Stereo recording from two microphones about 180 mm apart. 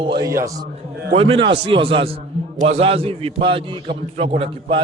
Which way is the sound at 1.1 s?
30° right (ahead or behind).